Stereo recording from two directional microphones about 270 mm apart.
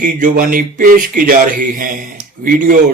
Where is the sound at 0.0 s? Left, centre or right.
Right.